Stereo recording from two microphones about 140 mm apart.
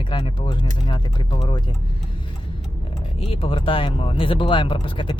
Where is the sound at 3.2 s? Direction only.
40° left (ahead or behind).